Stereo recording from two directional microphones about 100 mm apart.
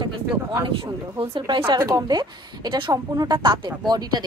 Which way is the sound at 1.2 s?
65° right (ahead or behind).